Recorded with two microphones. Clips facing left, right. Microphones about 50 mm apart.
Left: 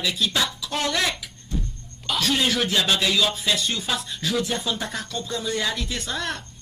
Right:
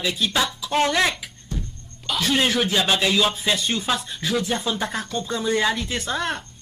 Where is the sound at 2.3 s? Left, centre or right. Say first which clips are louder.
Right 4 dB; right.